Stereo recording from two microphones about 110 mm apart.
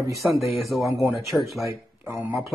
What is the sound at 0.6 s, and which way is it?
Speech, centre (ahead or behind).